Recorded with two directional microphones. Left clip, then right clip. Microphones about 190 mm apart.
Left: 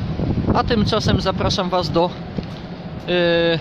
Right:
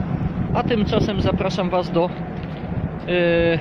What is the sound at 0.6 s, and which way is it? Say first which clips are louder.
Speech: even; 25° left (ahead or behind).